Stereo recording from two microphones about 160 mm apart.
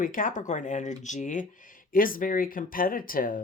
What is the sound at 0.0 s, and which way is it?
Speech, 60° left (ahead or behind).